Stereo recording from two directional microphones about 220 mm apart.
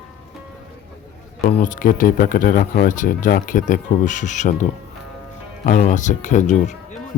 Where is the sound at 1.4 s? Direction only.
35° left (ahead or behind).